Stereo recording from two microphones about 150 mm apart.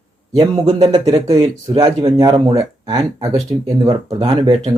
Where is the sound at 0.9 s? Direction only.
25° right (ahead or behind).